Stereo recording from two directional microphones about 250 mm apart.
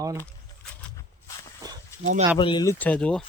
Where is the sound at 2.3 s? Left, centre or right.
Centre.